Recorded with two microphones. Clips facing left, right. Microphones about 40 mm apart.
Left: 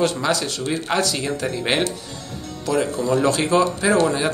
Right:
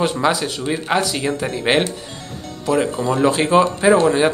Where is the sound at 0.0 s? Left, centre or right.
Centre.